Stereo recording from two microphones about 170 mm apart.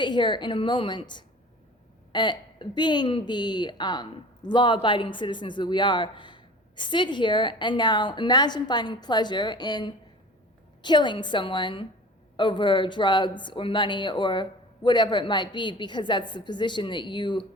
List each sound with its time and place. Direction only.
0.0 s speech: 25° left (ahead or behind)